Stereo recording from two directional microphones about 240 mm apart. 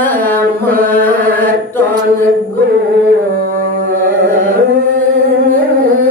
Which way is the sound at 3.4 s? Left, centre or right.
Right.